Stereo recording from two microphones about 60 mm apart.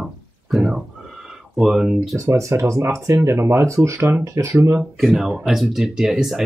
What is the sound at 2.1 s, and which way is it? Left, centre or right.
Speech, right.